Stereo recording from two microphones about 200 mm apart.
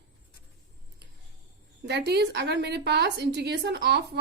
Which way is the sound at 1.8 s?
55° right (ahead or behind).